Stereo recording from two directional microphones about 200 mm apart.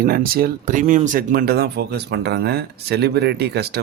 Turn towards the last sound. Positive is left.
turn(degrees=-55)  # may be behind; listen again after turning